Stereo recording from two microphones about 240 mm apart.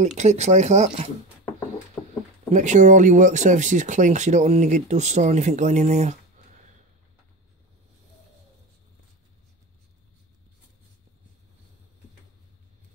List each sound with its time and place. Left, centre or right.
0.0 s speech: right
2.0 s a sound: centre
2.5 s speech: right